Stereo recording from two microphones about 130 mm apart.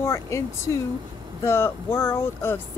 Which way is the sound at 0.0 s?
20° left (ahead or behind).